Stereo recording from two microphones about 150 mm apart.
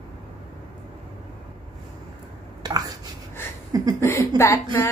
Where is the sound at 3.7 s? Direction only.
25° right (ahead or behind).